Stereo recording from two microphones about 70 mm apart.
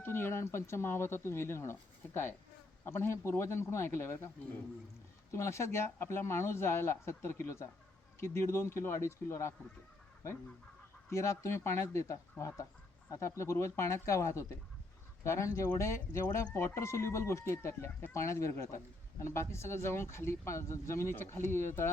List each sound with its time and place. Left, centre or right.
0.0 s speech: left
5.3 s speech: left
11.1 s speech: left